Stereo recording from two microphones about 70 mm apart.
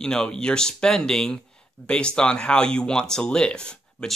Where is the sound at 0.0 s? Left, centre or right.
Centre.